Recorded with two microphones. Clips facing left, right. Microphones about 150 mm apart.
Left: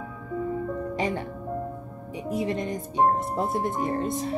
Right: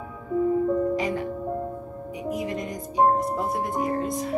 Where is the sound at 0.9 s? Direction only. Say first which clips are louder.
Right 2 dB; 30° left (ahead or behind).